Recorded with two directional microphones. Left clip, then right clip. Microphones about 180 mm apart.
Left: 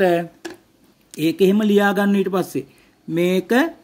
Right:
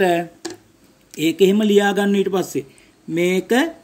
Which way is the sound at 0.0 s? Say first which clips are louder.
Even; 35° left (ahead or behind).